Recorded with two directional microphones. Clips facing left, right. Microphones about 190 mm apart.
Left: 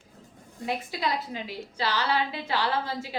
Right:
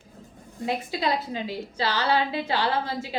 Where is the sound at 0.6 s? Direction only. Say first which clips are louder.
Right 3 dB; 25° right (ahead or behind).